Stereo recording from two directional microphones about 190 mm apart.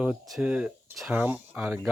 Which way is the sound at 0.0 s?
5° right (ahead or behind).